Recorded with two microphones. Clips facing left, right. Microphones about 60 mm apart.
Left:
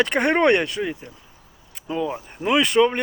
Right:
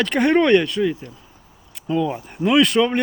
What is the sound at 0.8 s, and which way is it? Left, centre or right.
Speech, centre.